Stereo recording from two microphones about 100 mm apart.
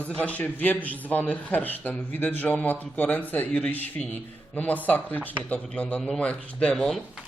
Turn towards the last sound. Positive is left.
turn(degrees=5)  # may be behind; listen again after turning